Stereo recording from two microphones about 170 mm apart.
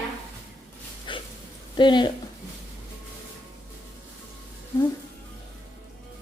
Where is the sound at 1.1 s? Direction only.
30° left (ahead or behind).